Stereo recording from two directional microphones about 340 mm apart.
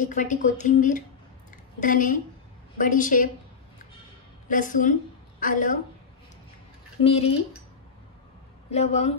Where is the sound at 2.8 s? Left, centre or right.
Left.